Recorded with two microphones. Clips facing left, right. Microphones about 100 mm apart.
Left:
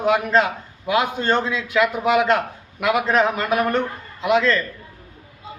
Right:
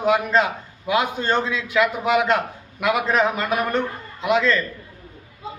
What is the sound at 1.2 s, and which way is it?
Speech, 10° right (ahead or behind).